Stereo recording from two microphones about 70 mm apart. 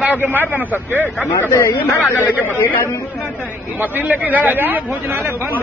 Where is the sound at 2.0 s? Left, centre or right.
Left.